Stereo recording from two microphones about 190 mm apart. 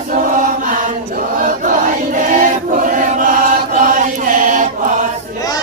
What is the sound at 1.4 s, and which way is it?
Choir, 45° right (ahead or behind).